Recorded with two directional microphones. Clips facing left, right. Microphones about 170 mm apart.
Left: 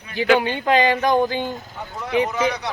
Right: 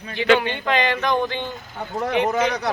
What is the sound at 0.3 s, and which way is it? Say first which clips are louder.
Speech: left 3 dB; 40° left (ahead or behind).